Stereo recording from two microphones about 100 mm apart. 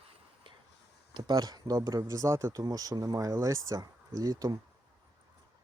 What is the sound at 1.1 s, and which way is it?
Speech, 45° right (ahead or behind).